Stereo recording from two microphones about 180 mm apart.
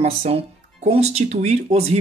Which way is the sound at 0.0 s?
35° right (ahead or behind).